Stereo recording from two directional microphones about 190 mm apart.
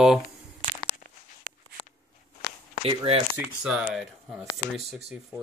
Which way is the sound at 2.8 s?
25° right (ahead or behind).